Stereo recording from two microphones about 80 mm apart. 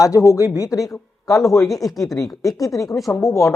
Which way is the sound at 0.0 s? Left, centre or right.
Left.